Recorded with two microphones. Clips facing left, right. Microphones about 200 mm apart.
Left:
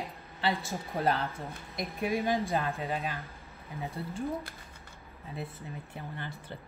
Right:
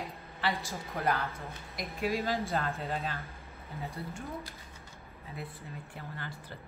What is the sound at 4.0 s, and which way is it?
Speech, 30° left (ahead or behind).